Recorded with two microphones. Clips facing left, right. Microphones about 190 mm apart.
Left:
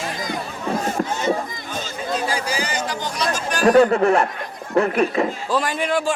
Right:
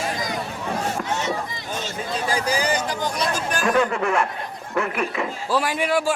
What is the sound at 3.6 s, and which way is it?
A man's voice, 40° left (ahead or behind).